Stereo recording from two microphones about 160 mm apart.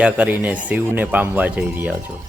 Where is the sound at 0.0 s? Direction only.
10° right (ahead or behind).